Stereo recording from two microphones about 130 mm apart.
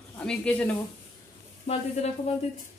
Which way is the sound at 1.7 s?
55° left (ahead or behind).